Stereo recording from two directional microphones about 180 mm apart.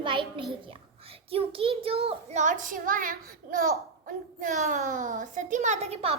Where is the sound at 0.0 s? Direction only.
30° right (ahead or behind).